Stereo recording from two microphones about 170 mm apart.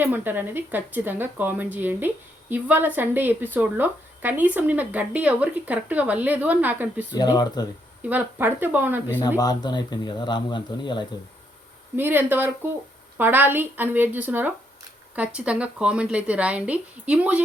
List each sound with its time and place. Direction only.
0.0 s speech: 10° right (ahead or behind)
7.1 s speech: 25° left (ahead or behind)
8.0 s speech: 10° right (ahead or behind)
9.4 s speech: 25° left (ahead or behind)
11.9 s speech: 10° right (ahead or behind)